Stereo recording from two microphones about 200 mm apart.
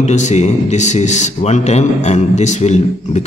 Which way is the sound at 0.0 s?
35° left (ahead or behind).